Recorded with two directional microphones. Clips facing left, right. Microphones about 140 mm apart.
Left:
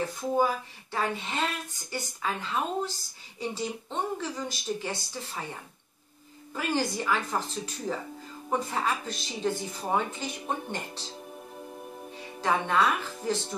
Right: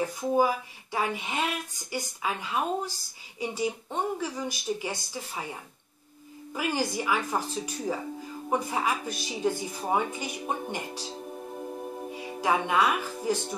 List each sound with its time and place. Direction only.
0.0 s speech: 10° right (ahead or behind)
12.1 s speech: 10° right (ahead or behind)